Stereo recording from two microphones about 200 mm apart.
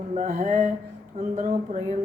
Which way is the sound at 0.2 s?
40° right (ahead or behind).